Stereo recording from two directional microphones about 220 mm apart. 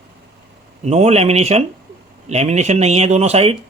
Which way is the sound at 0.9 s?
30° right (ahead or behind).